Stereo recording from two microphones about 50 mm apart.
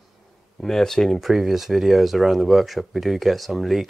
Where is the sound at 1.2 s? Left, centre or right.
Centre.